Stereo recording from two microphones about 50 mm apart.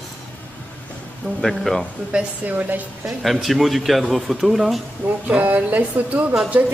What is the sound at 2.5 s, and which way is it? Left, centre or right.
Speech, right.